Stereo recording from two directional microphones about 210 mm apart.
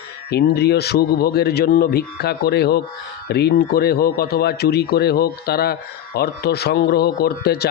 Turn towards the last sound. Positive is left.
turn(degrees=50)  # may be behind; listen again after turning